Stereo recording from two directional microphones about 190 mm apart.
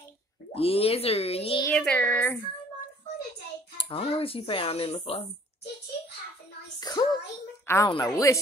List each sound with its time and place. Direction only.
0.6 s speech: 30° left (ahead or behind)
1.7 s speech: 5° left (ahead or behind)
3.7 s speech: 30° left (ahead or behind)
6.8 s child singing: 20° left (ahead or behind)
7.6 s a woman's voice: 15° left (ahead or behind)